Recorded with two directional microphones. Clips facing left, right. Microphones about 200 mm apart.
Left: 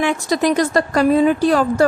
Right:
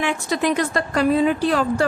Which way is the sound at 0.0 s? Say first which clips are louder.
Left 4 dB; 40° left (ahead or behind).